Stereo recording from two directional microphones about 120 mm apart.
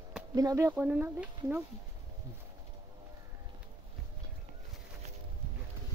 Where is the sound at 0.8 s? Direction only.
10° right (ahead or behind).